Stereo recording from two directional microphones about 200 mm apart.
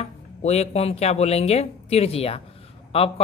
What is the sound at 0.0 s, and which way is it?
Speech, 30° left (ahead or behind).